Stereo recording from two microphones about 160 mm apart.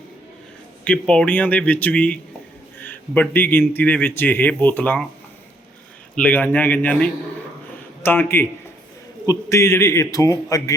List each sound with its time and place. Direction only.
0.9 s speech: 5° left (ahead or behind)
6.1 s a man's voice: 10° left (ahead or behind)